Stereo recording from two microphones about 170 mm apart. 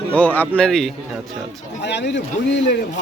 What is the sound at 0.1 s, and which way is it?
Speech, 10° left (ahead or behind).